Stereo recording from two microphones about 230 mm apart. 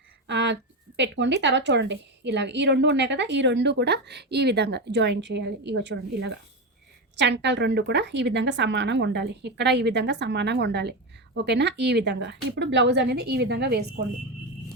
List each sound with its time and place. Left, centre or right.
0.3 s speech: right